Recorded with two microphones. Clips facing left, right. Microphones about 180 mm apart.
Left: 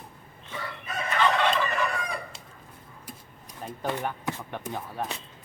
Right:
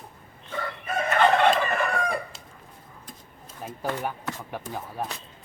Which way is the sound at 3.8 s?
10° right (ahead or behind).